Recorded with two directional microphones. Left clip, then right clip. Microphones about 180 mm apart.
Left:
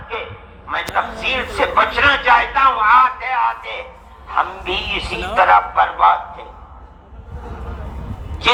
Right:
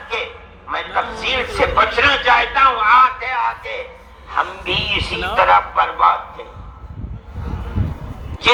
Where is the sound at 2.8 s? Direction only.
Centre (ahead or behind).